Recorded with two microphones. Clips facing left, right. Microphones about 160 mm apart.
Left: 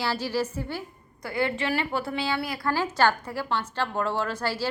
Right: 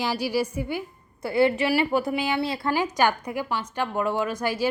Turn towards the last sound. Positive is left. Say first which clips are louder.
# right 3 dB
turn(degrees=-15)  # may be behind; listen again after turning